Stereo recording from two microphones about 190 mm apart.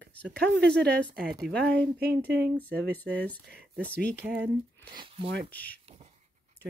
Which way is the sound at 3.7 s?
55° right (ahead or behind).